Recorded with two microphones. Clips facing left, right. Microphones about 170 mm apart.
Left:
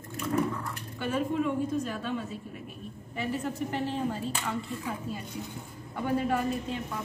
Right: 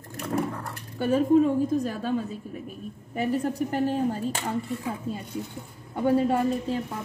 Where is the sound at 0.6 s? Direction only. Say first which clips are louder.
Right 5 dB; 40° right (ahead or behind).